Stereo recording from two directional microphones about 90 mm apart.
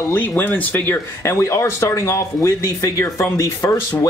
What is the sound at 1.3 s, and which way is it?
A man's voice, 30° left (ahead or behind).